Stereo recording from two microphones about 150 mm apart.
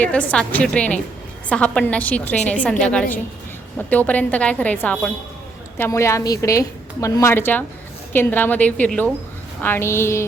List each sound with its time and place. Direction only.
0.0 s a woman's voice: 10° left (ahead or behind)